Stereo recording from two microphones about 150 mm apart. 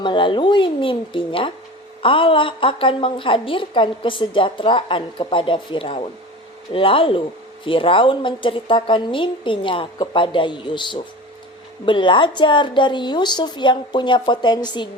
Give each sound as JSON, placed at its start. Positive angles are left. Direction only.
{"t": 0.0, "sound": "a woman's voice", "side_deg": 30}